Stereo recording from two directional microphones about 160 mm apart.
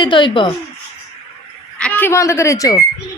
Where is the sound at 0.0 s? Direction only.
30° left (ahead or behind).